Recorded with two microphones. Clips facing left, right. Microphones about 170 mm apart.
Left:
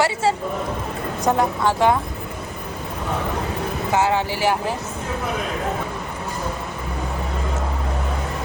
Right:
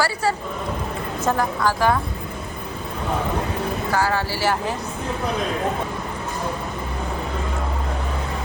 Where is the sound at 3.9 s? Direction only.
20° left (ahead or behind).